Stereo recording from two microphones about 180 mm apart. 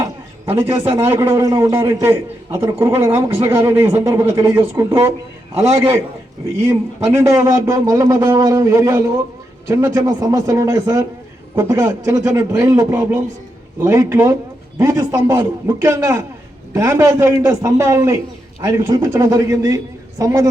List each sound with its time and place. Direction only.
0.5 s a man's voice: 25° right (ahead or behind)
1.1 s a man's voice: 15° right (ahead or behind)